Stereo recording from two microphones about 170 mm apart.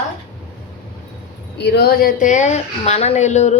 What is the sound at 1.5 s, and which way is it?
A woman's voice, 75° left (ahead or behind).